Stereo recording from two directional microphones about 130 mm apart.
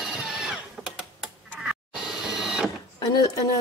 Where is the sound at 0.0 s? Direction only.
5° right (ahead or behind).